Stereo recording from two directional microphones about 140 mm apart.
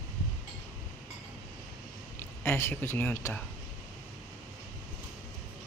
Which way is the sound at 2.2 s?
15° left (ahead or behind).